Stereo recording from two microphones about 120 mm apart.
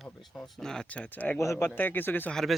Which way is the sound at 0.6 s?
5° left (ahead or behind).